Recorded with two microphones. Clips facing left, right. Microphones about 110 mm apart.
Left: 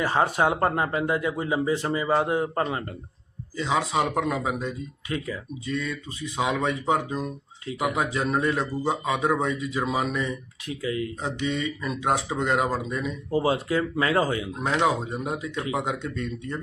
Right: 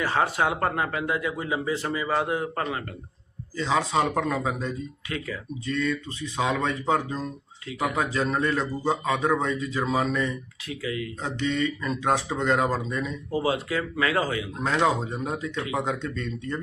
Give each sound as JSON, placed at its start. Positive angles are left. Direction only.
{"t": 0.0, "sound": "speech", "side_deg": 20}
{"t": 3.6, "sound": "a man's voice", "side_deg": 10}
{"t": 5.0, "sound": "speech", "side_deg": 25}
{"t": 5.6, "sound": "a man's voice", "side_deg": 10}
{"t": 10.7, "sound": "speech", "side_deg": 30}
{"t": 11.2, "sound": "a man's voice", "side_deg": 10}
{"t": 13.3, "sound": "speech", "side_deg": 30}
{"t": 14.8, "sound": "a man's voice", "side_deg": 10}